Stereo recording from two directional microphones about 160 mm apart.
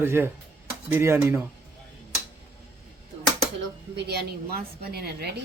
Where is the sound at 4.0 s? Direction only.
90° right.